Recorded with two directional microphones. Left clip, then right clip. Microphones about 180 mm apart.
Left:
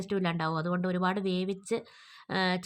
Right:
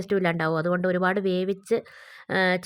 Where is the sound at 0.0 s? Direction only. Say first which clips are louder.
Right 7 dB; 30° right (ahead or behind).